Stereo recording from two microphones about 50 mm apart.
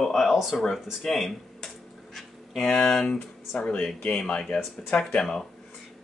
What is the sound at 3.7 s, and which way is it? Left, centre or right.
Speech, left.